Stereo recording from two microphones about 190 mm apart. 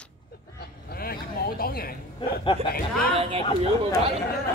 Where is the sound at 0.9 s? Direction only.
50° left (ahead or behind).